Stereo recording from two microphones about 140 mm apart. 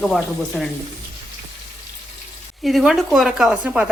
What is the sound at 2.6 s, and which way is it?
Speech, centre (ahead or behind).